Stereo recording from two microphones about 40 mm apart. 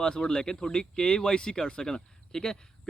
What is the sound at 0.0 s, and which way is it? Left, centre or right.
Speech, left.